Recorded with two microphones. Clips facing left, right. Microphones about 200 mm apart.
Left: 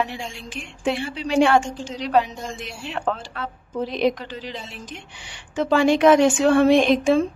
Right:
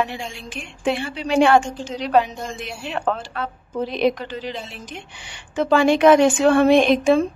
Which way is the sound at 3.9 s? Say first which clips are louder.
Right 2 dB; 60° right (ahead or behind).